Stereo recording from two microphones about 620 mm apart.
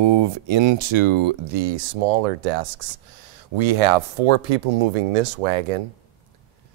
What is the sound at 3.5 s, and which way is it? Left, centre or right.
Speech, right.